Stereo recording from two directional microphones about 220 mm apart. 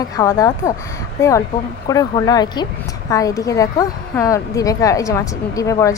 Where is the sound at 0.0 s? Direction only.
15° left (ahead or behind).